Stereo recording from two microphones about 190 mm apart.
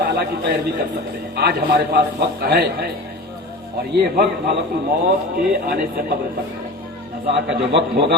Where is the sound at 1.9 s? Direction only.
60° right (ahead or behind).